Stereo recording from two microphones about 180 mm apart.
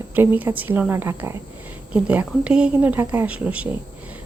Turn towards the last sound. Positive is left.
turn(degrees=-10)  # may be behind; listen again after turning